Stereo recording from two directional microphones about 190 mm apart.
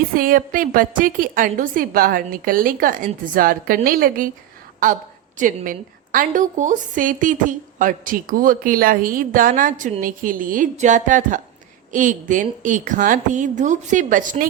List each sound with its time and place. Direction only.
0.1 s a woman's voice: 45° right (ahead or behind)